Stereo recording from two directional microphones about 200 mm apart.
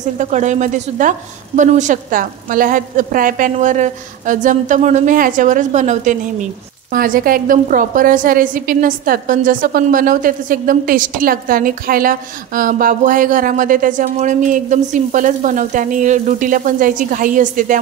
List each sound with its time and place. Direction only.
0.0 s a woman's voice: 35° right (ahead or behind)